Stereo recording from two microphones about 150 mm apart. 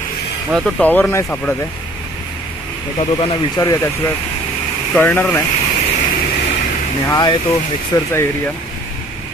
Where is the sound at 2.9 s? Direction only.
35° left (ahead or behind).